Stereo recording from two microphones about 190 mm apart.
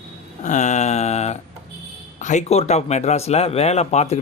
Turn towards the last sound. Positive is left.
turn(degrees=35)  # may be behind; listen again after turning